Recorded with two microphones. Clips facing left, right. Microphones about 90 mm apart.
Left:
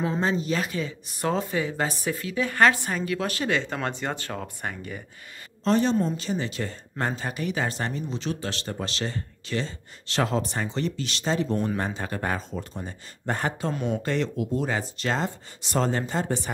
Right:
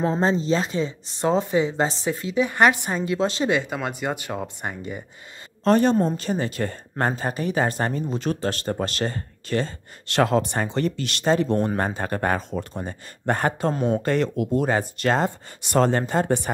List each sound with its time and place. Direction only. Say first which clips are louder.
0.0 s speech: right 4 dB; 30° right (ahead or behind)
5.6 s a woman's voice: right 4 dB; 50° right (ahead or behind)